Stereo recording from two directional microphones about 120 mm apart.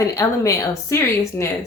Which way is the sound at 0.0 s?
25° left (ahead or behind).